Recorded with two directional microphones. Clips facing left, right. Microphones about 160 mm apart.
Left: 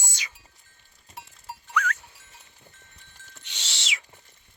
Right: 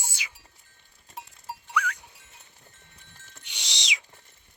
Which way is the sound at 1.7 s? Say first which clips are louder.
Left 1 dB; 15° right (ahead or behind).